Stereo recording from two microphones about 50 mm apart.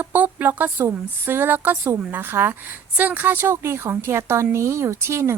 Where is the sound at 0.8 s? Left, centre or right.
Right.